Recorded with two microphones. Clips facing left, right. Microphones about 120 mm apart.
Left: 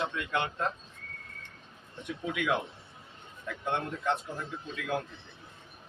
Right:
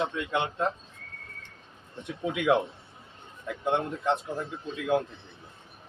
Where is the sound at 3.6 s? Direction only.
20° right (ahead or behind).